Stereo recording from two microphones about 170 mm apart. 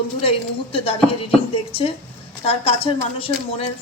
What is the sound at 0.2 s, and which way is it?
Speech, 35° left (ahead or behind).